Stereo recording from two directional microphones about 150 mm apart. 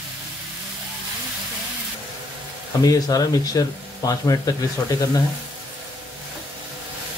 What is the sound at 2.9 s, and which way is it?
Speech, 25° left (ahead or behind).